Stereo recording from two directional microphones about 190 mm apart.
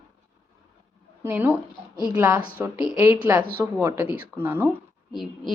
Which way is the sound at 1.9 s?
20° left (ahead or behind).